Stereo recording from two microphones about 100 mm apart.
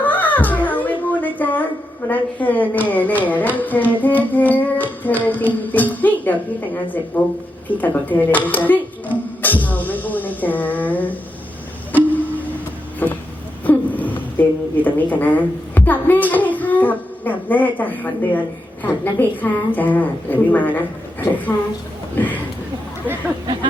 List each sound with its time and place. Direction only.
0.0 s wail: 15° left (ahead or behind)
2.0 s a woman's voice: 15° left (ahead or behind)
13.0 s a sound: 20° left (ahead or behind)
13.7 s a woman's voice: 15° left (ahead or behind)